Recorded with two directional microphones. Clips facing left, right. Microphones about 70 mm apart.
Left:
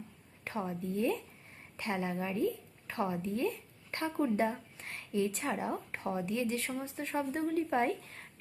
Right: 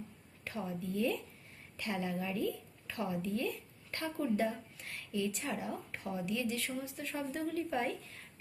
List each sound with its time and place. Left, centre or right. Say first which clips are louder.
0.4 s a woman's voice: left 3 dB; left